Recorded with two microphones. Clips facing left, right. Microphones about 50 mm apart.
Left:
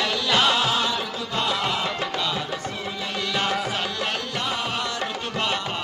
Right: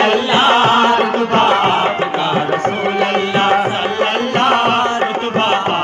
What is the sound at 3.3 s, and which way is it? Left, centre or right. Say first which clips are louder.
Music: right 11 dB; right.